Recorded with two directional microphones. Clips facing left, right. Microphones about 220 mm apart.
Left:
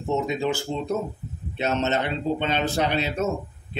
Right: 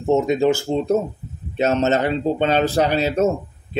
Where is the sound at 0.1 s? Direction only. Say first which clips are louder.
Right 8 dB; 45° right (ahead or behind).